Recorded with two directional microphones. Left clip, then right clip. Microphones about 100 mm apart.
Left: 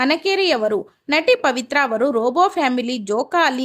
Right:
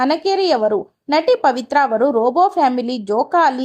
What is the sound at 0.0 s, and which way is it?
A woman's voice, 15° right (ahead or behind).